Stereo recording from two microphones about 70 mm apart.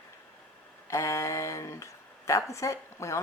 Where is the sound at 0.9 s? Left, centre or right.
Left.